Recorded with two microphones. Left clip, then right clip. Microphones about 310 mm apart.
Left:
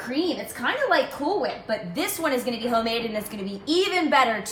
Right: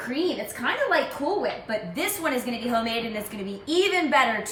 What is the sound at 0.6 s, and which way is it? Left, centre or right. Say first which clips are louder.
Speech: left 1 dB; centre.